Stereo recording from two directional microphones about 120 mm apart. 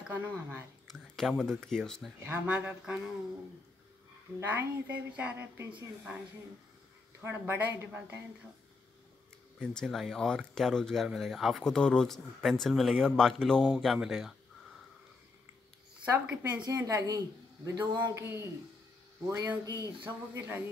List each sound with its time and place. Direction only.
0.1 s a woman's voice: 15° right (ahead or behind)
0.8 s a sound: centre (ahead or behind)
1.4 s speech: 5° left (ahead or behind)
2.2 s a woman's voice: 15° right (ahead or behind)
4.4 s a woman's voice: 15° right (ahead or behind)
7.2 s a woman's voice: 20° right (ahead or behind)
9.6 s speech: 5° left (ahead or behind)
16.1 s a woman's voice: 15° right (ahead or behind)
16.7 s speech: 30° right (ahead or behind)
17.9 s speech: 20° right (ahead or behind)
20.3 s a woman's voice: 15° right (ahead or behind)